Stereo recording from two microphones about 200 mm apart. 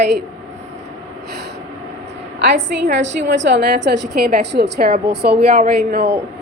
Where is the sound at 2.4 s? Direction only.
60° right (ahead or behind).